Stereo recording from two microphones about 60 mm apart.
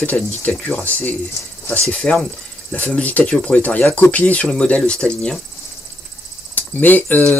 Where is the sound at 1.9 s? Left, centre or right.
Centre.